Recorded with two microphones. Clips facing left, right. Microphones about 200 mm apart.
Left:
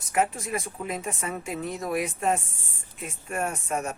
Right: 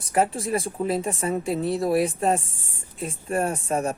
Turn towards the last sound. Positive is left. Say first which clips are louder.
# right 5 dB
turn(degrees=-30)  # may be behind; listen again after turning